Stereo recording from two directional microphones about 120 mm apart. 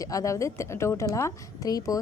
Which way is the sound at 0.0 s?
30° left (ahead or behind).